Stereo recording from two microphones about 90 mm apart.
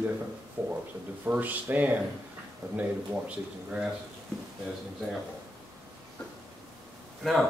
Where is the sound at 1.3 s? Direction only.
20° right (ahead or behind).